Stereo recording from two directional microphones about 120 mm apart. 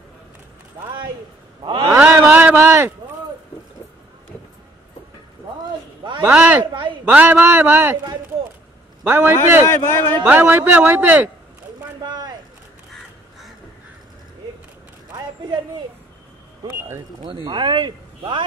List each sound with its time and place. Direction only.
1.9 s a sound: 20° right (ahead or behind)
6.3 s a man's voice: 10° right (ahead or behind)
6.6 s speech: 40° right (ahead or behind)
7.1 s a man's voice: 15° right (ahead or behind)
9.0 s a man's voice: 20° right (ahead or behind)
9.7 s speech: 20° left (ahead or behind)
10.2 s a man's voice: 15° right (ahead or behind)
12.0 s a sound: 35° right (ahead or behind)
16.6 s vehicle: 20° right (ahead or behind)
17.2 s a man's voice: 40° right (ahead or behind)